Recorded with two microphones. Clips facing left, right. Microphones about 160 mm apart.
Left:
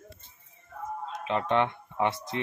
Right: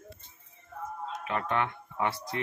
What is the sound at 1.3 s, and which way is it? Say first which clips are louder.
Speech: left 5 dB; 25° left (ahead or behind).